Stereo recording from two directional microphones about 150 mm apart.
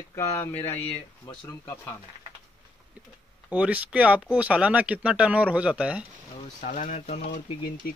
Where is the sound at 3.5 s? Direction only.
10° right (ahead or behind).